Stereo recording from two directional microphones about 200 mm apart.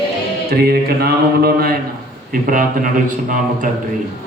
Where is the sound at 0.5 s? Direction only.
50° right (ahead or behind).